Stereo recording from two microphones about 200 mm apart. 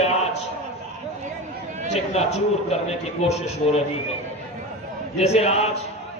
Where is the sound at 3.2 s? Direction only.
30° left (ahead or behind).